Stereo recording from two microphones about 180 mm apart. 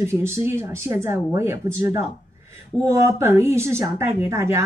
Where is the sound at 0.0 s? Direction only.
15° right (ahead or behind).